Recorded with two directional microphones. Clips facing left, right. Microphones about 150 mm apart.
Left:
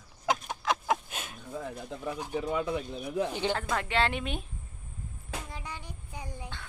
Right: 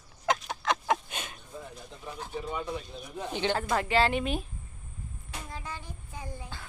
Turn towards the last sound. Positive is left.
turn(degrees=15)  # may be behind; listen again after turning